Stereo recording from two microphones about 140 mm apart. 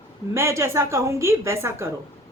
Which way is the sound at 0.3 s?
20° right (ahead or behind).